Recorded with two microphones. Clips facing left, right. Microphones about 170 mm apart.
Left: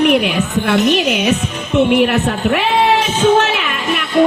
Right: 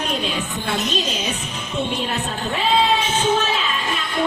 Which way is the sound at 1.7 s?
70° left (ahead or behind).